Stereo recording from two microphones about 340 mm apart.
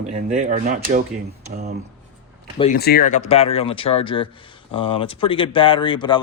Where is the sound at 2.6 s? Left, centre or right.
Left.